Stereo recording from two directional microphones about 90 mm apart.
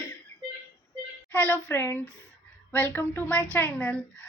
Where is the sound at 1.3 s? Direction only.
20° left (ahead or behind).